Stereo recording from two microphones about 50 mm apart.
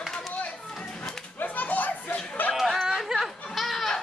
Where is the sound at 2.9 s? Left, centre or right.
Centre.